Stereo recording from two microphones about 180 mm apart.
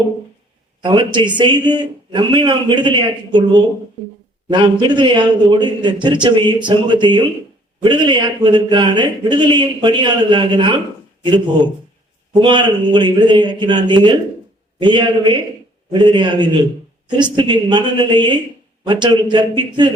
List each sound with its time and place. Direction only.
0.8 s a man's voice: 25° right (ahead or behind)
12.3 s a man's voice: 25° right (ahead or behind)